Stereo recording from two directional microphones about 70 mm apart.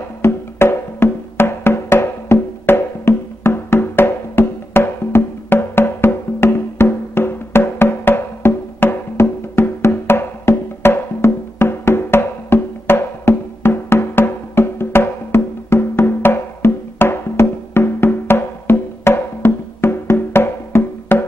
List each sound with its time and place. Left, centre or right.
0.2 s music: left